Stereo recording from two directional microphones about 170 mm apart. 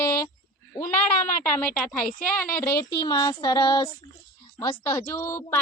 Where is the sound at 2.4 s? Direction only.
20° left (ahead or behind).